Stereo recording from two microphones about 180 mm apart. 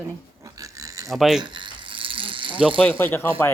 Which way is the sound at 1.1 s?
Centre (ahead or behind).